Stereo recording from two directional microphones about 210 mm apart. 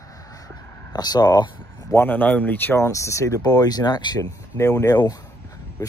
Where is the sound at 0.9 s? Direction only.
20° left (ahead or behind).